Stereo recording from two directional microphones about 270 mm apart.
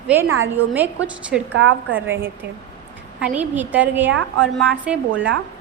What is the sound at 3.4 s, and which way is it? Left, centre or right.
A woman's voice, centre.